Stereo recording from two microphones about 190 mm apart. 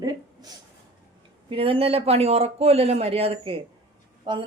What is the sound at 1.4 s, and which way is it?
Speech, 30° right (ahead or behind).